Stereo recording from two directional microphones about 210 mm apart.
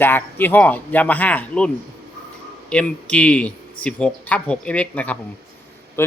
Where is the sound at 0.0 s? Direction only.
10° left (ahead or behind).